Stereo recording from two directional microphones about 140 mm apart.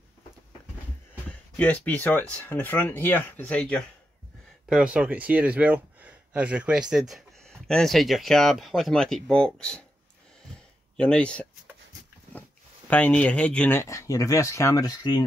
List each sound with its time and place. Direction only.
1.6 s speech: 10° left (ahead or behind)
4.6 s speech: 5° right (ahead or behind)
11.0 s speech: 10° left (ahead or behind)
12.9 s speech: 10° left (ahead or behind); by 15.2 s 30° left (ahead or behind)